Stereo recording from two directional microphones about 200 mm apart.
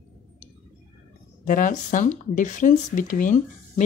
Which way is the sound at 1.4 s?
45° left (ahead or behind).